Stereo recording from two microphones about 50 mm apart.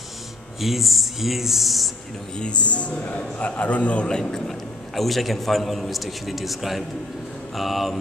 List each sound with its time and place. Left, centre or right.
0.6 s a man's voice: centre
2.3 s a man's voice: left
4.2 s a man's voice: centre